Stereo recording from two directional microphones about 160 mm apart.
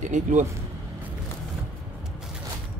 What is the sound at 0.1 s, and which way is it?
Speech, 50° right (ahead or behind).